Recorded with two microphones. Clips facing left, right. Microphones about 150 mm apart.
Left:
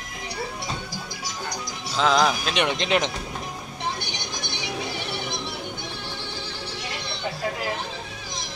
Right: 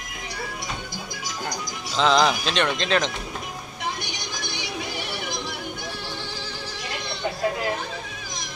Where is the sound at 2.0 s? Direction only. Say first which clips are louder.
Right 1 dB; 5° left (ahead or behind).